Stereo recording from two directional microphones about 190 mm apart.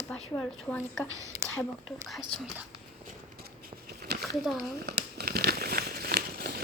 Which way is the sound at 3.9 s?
55° right (ahead or behind).